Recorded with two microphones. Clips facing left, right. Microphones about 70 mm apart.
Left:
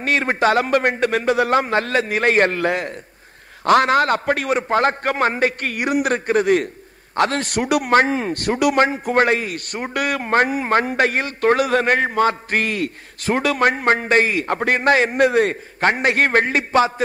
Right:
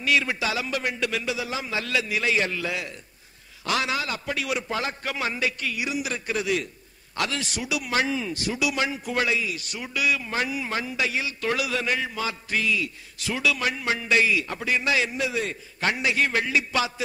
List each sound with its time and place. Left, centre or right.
0.0 s a man's voice: left